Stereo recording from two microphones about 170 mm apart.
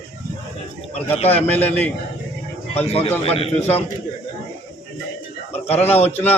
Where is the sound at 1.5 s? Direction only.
10° left (ahead or behind).